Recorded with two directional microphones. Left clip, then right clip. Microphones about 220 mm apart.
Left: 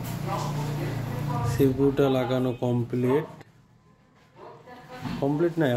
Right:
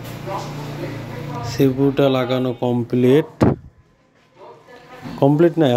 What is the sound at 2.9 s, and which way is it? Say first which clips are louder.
Speech: right 12 dB; 45° right (ahead or behind).